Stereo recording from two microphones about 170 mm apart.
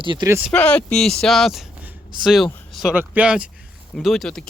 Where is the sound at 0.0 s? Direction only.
30° right (ahead or behind).